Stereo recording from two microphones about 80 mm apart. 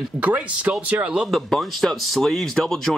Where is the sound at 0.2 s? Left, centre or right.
Centre.